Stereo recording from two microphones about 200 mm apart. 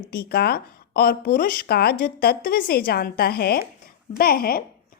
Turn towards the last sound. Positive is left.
turn(degrees=50)  # may be behind; listen again after turning